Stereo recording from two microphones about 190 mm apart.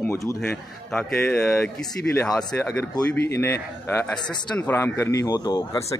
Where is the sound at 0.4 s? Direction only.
5° left (ahead or behind).